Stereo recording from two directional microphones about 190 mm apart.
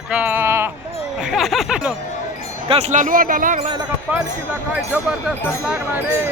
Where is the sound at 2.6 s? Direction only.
35° right (ahead or behind).